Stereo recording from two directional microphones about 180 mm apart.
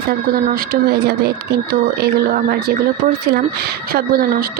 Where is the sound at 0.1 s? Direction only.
55° right (ahead or behind).